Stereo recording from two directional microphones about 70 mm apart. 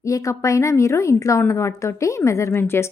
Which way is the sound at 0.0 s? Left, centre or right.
Left.